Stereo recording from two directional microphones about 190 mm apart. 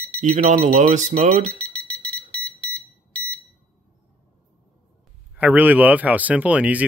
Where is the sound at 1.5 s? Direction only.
5° left (ahead or behind).